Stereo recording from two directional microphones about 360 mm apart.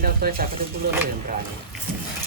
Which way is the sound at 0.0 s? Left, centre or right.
Right.